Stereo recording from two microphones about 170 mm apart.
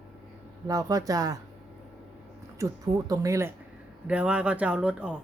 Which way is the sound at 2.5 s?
20° right (ahead or behind).